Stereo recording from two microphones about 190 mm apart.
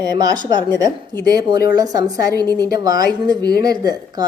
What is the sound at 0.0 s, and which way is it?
A woman's voice, 20° right (ahead or behind).